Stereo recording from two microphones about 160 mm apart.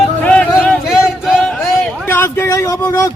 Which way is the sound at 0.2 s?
10° left (ahead or behind).